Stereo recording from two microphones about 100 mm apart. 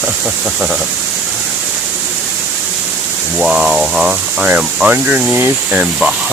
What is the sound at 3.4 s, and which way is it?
Speech, 10° right (ahead or behind).